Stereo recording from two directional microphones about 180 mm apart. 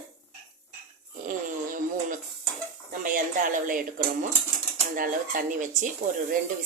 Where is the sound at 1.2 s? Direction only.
50° right (ahead or behind).